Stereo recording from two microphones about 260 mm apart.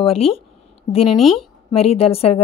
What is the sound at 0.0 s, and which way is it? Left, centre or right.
Speech, left.